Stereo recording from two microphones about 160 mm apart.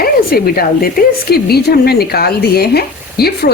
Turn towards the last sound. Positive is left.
turn(degrees=80)